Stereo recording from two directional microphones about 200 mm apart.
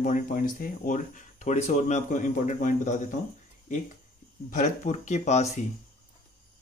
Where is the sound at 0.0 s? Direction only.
45° left (ahead or behind).